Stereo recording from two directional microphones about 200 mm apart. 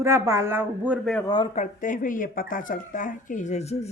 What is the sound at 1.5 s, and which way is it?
Speech, 40° left (ahead or behind).